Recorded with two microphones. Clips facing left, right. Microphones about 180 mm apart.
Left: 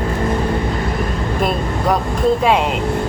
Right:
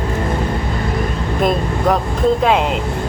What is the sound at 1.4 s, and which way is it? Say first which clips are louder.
Speech: right 3 dB; 5° left (ahead or behind).